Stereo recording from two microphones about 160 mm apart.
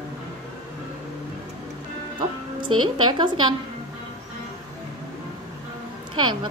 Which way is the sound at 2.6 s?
30° right (ahead or behind).